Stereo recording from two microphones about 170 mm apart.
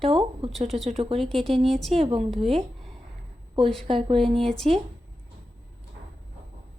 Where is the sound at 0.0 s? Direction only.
30° right (ahead or behind).